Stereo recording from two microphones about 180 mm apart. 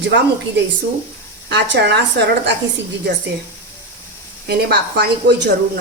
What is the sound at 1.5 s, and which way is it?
Speech, 70° right (ahead or behind).